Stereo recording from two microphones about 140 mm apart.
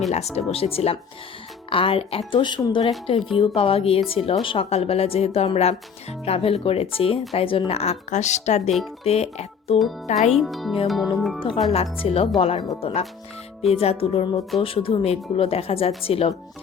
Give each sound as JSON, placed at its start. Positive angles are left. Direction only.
{"t": 0.3, "sound": "speech", "side_deg": 45}
{"t": 10.3, "sound": "speech", "side_deg": 0}
{"t": 11.3, "sound": "speech", "side_deg": 40}